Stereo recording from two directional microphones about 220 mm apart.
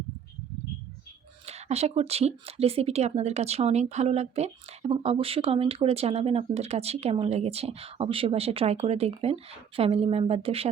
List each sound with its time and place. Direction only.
1.5 s speech: 30° right (ahead or behind)